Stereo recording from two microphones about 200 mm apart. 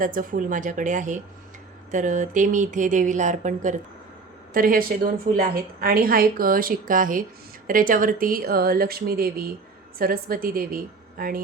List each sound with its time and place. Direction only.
0.0 s a woman's voice: 40° right (ahead or behind)